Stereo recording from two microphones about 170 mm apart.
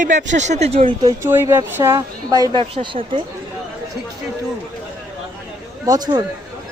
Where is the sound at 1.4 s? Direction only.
15° right (ahead or behind); by 3.2 s 30° right (ahead or behind).